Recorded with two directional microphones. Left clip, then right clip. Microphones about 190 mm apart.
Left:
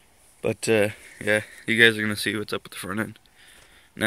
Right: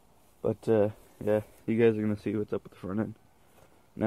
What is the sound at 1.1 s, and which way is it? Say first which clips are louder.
Speech: left 5 dB; 20° left (ahead or behind).